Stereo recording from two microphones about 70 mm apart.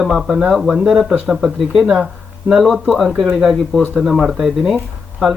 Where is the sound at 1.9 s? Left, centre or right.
Centre.